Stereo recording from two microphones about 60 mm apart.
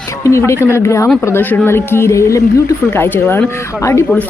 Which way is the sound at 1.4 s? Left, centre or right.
Left.